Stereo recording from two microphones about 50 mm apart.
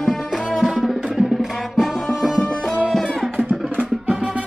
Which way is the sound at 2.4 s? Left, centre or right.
Centre.